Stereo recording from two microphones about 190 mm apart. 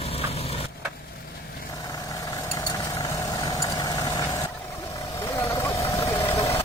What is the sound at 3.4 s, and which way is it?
Vehicle, 20° left (ahead or behind).